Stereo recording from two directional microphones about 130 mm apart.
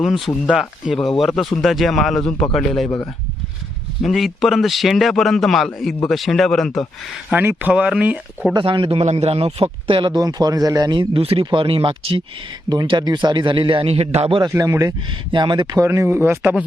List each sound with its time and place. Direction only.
0.4 s a man's voice: 5° right (ahead or behind)
4.0 s a man's voice: centre (ahead or behind)
7.3 s speech: 10° right (ahead or behind)
8.5 s a man's voice: 35° right (ahead or behind)
9.0 s speech: 50° right (ahead or behind); by 11.1 s 30° right (ahead or behind)
11.1 s a man's voice: 45° right (ahead or behind)
14.5 s a man's voice: 25° right (ahead or behind)
15.8 s speech: 20° right (ahead or behind)